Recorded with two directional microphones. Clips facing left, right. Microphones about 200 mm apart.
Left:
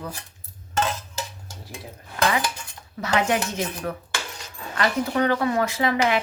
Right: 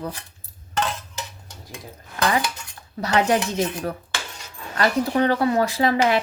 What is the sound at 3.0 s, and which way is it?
Speech, 35° right (ahead or behind).